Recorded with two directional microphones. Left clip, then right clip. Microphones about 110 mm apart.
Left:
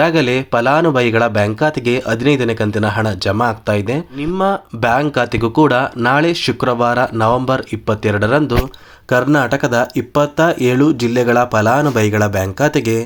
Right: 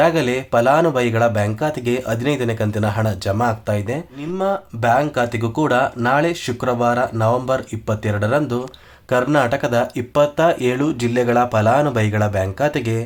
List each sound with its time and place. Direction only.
0.0 s speech: 30° left (ahead or behind)